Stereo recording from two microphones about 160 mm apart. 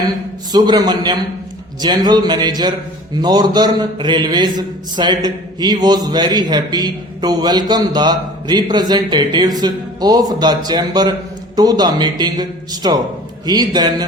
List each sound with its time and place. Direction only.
0.5 s a man's voice: 25° right (ahead or behind)